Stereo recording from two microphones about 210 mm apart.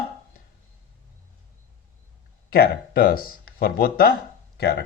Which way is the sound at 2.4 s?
45° left (ahead or behind).